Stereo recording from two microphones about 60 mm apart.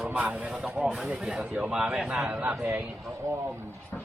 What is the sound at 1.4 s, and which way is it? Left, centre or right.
Speech, right.